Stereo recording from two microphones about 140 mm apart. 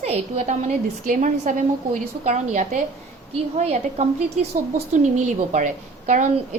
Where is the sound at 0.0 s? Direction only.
50° right (ahead or behind).